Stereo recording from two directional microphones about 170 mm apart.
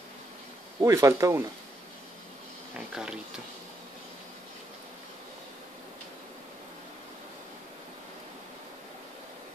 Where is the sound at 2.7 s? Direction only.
5° right (ahead or behind).